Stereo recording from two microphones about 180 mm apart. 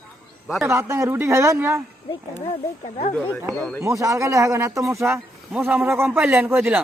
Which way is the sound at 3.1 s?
10° left (ahead or behind).